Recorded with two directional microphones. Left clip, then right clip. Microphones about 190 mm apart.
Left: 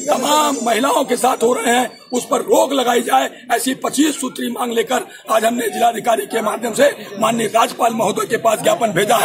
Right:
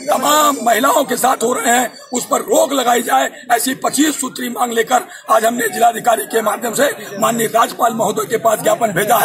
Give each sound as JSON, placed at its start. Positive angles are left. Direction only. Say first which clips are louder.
{"t": 0.1, "sound": "a man's voice", "louder": "right 2 dB", "side_deg": 10}